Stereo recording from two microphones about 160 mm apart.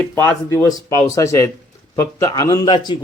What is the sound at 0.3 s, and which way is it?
Speech, 20° left (ahead or behind).